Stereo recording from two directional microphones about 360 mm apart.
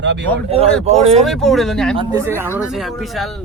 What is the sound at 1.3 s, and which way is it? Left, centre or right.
Speech, centre.